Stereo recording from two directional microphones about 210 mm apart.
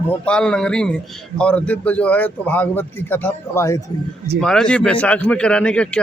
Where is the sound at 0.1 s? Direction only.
5° left (ahead or behind).